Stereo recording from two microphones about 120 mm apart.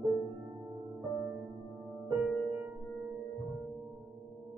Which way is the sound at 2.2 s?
10° right (ahead or behind).